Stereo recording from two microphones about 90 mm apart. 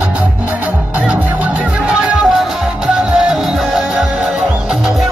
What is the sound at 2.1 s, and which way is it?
Music, centre (ahead or behind).